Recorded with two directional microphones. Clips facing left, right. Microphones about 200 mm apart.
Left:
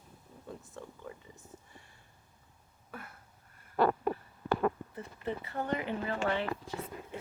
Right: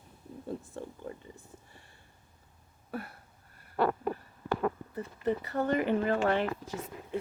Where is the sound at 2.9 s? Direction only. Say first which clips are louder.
Right 8 dB; 35° right (ahead or behind).